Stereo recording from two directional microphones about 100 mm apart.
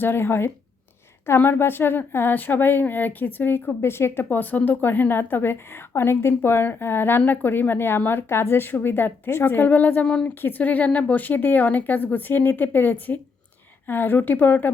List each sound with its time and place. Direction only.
0.0 s speech: 20° left (ahead or behind)